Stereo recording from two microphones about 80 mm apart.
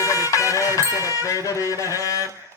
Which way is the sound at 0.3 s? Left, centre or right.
Left.